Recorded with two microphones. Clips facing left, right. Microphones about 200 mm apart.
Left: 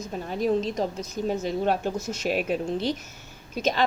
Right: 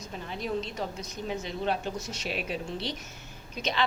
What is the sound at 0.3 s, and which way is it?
A woman's voice, 45° left (ahead or behind).